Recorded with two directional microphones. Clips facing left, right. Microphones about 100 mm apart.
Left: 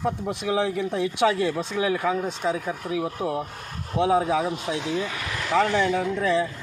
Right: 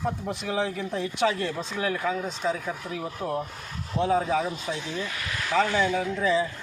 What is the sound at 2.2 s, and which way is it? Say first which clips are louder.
Speech: left 2 dB; 55° left (ahead or behind).